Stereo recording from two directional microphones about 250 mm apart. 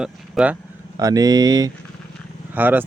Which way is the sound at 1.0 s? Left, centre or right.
Centre.